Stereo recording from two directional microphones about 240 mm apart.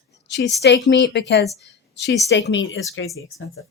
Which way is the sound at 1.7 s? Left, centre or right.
Left.